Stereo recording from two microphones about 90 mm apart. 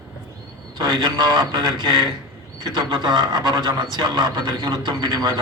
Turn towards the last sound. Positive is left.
turn(degrees=-45)  # may be behind; listen again after turning